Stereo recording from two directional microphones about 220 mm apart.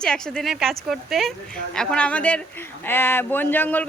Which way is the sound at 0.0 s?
5° left (ahead or behind).